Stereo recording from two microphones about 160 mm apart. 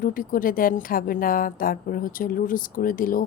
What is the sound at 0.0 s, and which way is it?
A woman's voice, 60° left (ahead or behind).